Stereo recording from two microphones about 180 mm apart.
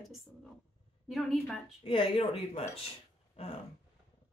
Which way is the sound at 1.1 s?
Centre (ahead or behind).